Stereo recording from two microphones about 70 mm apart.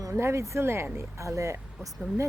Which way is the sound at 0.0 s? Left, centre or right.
Right.